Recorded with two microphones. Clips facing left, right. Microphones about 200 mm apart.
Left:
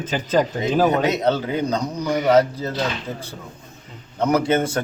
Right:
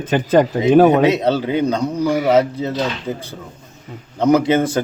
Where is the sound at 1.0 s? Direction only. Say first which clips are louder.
Right 4 dB; 30° right (ahead or behind).